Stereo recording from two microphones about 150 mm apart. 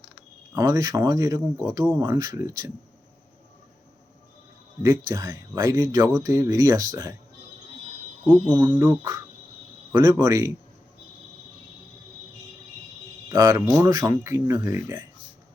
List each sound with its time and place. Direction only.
0.5 s speech: 25° right (ahead or behind)
4.8 s speech: 20° right (ahead or behind)
8.5 s speech: 15° right (ahead or behind)
13.2 s speech: 20° right (ahead or behind)